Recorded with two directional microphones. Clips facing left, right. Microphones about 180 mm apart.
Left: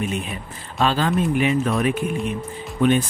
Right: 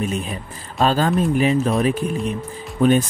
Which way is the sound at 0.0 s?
40° right (ahead or behind).